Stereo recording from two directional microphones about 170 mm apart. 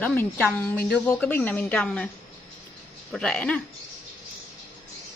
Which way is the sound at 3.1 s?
5° left (ahead or behind).